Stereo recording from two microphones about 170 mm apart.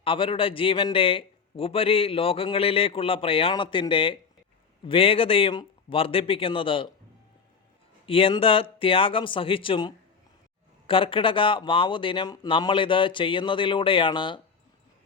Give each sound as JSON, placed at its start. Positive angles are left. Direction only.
{"t": 0.0, "sound": "a man's voice", "side_deg": 30}
{"t": 8.0, "sound": "a man's voice", "side_deg": 35}